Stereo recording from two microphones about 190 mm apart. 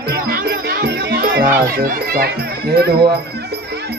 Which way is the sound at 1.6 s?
50° right (ahead or behind).